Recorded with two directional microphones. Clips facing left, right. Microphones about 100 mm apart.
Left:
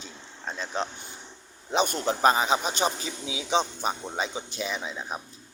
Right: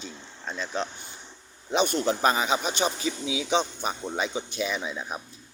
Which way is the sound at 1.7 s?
40° left (ahead or behind).